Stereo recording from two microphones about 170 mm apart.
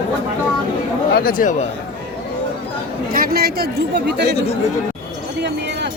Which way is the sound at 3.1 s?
60° right (ahead or behind).